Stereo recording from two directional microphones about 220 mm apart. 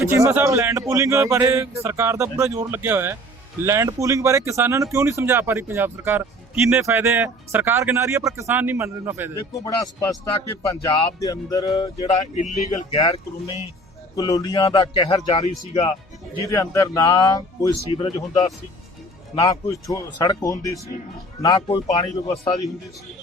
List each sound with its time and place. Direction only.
0.0 s speech: 10° right (ahead or behind)
9.5 s speech: 15° left (ahead or behind)
11.2 s speech: 15° left (ahead or behind)
12.0 s speech: 30° left (ahead or behind)
16.5 s speech: 15° left (ahead or behind)